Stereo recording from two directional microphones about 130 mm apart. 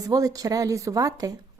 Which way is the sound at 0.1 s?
30° right (ahead or behind).